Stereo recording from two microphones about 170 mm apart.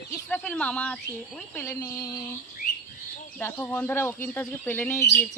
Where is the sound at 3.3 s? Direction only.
10° left (ahead or behind).